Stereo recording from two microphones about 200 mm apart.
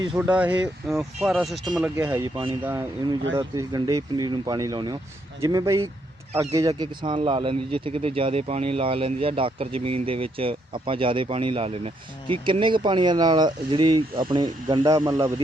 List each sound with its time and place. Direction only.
0.2 s speech: 5° right (ahead or behind)
2.0 s speech: 10° right (ahead or behind)
2.3 s speech: 25° right (ahead or behind)